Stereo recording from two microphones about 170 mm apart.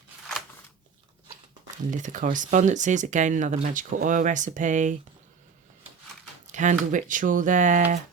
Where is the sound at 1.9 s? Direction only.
50° right (ahead or behind).